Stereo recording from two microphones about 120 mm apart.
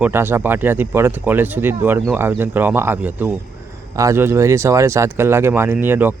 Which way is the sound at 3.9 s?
25° right (ahead or behind).